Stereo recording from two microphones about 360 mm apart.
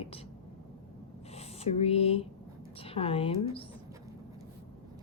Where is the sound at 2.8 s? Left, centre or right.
Centre.